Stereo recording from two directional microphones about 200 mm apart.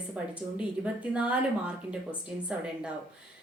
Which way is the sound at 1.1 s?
5° right (ahead or behind).